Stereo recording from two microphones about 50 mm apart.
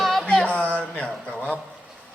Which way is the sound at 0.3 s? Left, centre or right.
Centre.